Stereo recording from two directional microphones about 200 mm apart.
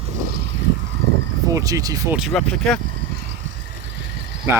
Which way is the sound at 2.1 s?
Centre (ahead or behind).